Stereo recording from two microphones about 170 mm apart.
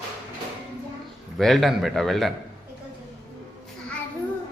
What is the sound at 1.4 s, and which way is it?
Speech, centre (ahead or behind).